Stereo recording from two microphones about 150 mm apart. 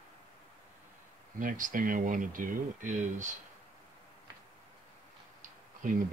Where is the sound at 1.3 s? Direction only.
60° right (ahead or behind).